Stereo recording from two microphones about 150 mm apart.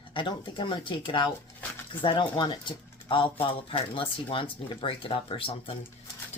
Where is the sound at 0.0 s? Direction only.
35° left (ahead or behind).